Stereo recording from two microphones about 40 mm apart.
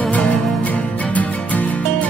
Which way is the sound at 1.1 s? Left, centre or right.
Left.